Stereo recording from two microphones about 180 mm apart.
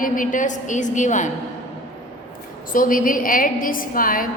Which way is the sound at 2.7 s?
50° left (ahead or behind).